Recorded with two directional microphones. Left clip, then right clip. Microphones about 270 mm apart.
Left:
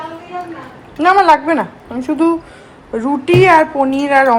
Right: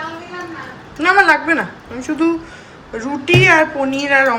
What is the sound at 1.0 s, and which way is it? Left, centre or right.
Speech, centre.